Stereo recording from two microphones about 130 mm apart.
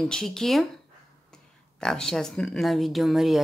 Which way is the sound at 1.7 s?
5° left (ahead or behind).